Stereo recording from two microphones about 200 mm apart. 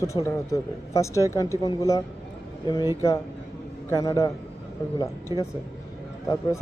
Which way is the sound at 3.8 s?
15° left (ahead or behind).